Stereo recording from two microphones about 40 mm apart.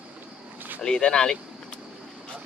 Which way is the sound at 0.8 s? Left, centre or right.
Centre.